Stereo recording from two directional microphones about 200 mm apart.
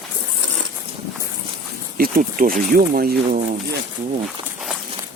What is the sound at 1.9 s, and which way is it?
Speech, 45° right (ahead or behind).